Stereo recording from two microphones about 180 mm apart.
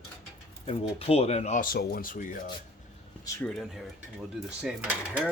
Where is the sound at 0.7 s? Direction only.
35° left (ahead or behind).